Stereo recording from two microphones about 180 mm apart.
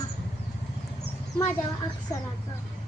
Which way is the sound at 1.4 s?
15° left (ahead or behind).